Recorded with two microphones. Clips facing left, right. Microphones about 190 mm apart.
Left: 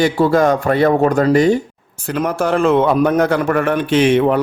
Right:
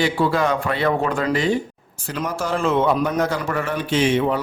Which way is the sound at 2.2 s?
60° left (ahead or behind).